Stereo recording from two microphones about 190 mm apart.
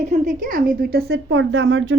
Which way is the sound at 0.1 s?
40° right (ahead or behind).